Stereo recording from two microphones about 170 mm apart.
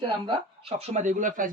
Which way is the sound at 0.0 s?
30° right (ahead or behind).